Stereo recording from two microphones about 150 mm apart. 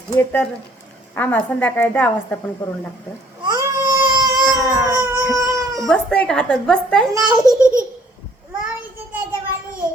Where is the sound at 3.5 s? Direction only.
25° right (ahead or behind).